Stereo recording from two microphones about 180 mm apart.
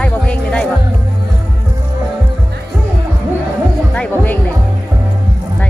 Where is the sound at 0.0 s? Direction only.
5° left (ahead or behind).